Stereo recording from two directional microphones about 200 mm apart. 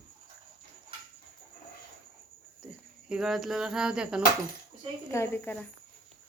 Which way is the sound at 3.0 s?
5° right (ahead or behind).